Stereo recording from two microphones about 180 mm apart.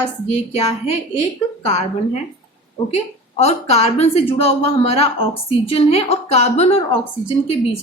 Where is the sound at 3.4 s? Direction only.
35° left (ahead or behind).